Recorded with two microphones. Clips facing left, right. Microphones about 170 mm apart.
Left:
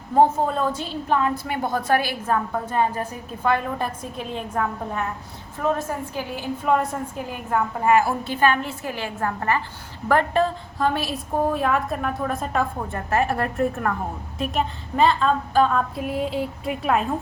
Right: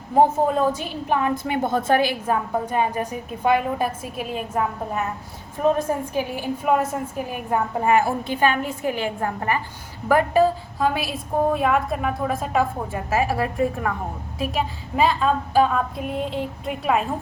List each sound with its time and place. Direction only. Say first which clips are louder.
0.2 s a woman's voice: right 1 dB; 10° right (ahead or behind)
16.0 s a woman's voice: left 1 dB; 5° left (ahead or behind)